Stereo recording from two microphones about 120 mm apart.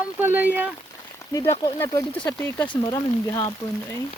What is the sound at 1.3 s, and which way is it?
Speech, 30° left (ahead or behind).